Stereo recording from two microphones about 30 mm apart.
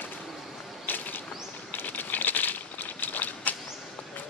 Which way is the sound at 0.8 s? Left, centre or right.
Left.